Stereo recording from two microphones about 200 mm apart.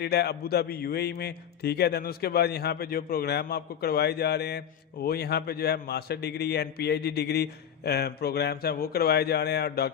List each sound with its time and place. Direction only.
0.0 s a man's voice: 55° left (ahead or behind)